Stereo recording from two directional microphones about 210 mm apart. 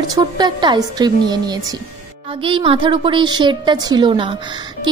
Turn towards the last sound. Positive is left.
turn(degrees=-25)  # may be behind; listen again after turning